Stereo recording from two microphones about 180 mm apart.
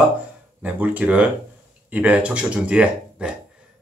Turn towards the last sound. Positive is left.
turn(degrees=-5)  # may be behind; listen again after turning